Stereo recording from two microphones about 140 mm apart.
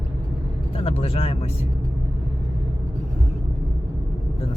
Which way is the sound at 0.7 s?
45° left (ahead or behind).